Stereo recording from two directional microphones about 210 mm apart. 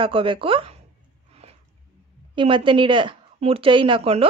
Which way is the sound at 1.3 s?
30° right (ahead or behind).